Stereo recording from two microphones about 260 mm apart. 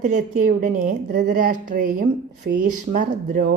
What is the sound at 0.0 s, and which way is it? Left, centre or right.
A woman's voice, right.